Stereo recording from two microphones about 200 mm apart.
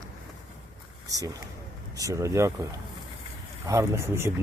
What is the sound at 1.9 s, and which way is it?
Speech, 15° right (ahead or behind).